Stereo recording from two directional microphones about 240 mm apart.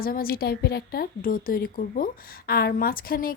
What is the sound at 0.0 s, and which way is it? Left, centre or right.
A woman's voice, left.